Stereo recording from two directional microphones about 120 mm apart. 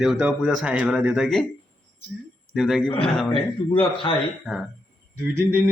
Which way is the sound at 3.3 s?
45° left (ahead or behind).